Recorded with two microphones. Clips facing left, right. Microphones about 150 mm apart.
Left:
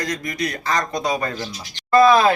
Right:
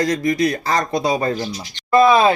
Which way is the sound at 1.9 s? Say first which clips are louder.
Right 1 dB; 20° right (ahead or behind).